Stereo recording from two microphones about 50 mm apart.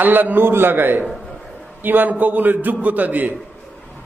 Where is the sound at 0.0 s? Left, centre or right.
Right.